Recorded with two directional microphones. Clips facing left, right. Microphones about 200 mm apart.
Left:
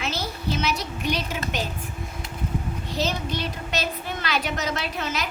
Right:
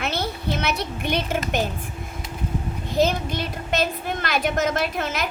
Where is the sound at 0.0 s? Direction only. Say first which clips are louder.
Right 3 dB; 60° right (ahead or behind).